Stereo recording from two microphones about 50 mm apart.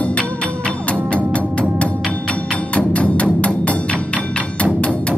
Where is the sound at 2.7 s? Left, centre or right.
Left.